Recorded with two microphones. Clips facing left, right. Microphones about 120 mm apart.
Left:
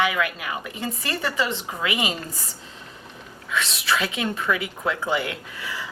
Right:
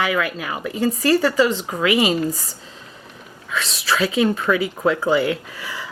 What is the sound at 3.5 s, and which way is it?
Speech, 35° right (ahead or behind).